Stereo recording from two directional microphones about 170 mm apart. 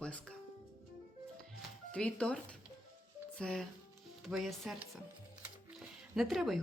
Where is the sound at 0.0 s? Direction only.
5° left (ahead or behind).